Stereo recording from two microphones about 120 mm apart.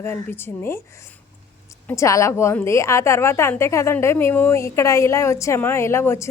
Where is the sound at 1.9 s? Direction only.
25° left (ahead or behind).